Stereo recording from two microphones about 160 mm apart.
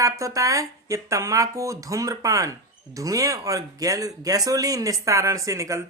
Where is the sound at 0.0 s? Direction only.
20° right (ahead or behind).